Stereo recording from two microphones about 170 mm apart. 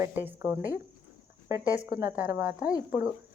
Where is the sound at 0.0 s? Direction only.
10° right (ahead or behind).